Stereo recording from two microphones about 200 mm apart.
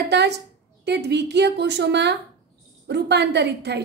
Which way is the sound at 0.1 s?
60° right (ahead or behind).